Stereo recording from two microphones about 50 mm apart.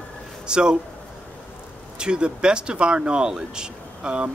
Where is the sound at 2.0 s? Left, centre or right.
Centre.